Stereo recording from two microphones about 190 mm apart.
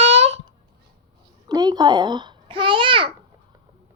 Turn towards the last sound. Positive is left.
turn(degrees=-25)  # may be behind; listen again after turning